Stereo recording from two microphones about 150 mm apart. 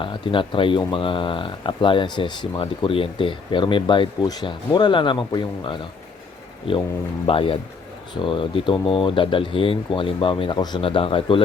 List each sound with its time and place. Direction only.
0.0 s speech: 35° left (ahead or behind)